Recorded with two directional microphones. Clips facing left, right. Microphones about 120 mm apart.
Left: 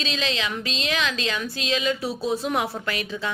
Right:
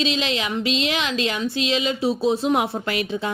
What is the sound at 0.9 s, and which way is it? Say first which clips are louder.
A woman's voice: right 2 dB; 25° right (ahead or behind).